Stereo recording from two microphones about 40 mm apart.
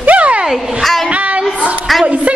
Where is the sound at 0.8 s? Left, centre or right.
Centre.